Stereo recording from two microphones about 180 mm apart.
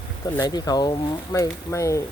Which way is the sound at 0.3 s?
20° left (ahead or behind).